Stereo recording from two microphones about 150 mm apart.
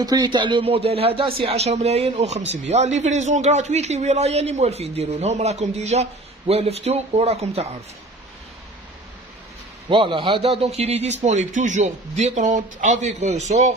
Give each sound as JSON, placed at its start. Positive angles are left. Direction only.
{"t": 0.0, "sound": "a man's voice", "side_deg": -25}
{"t": 9.8, "sound": "a man's voice", "side_deg": -35}